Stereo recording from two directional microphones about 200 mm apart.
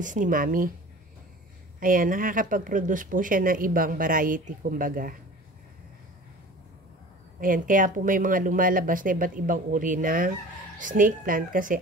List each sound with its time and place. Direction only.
0.0 s speech: 40° right (ahead or behind)
1.8 s speech: 45° right (ahead or behind)
7.3 s speech: 45° right (ahead or behind)